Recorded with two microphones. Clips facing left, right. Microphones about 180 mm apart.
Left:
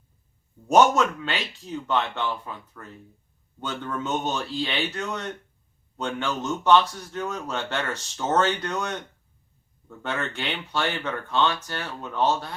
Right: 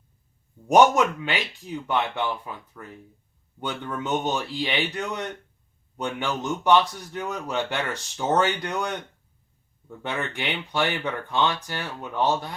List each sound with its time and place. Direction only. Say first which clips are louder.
0.7 s a man's voice: right 1 dB; 15° right (ahead or behind)
10.0 s a man's voice: even; 15° right (ahead or behind)